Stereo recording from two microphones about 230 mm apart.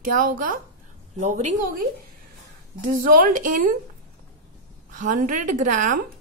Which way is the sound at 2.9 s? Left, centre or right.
Right.